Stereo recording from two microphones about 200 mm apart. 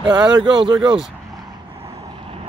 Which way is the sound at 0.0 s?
20° right (ahead or behind).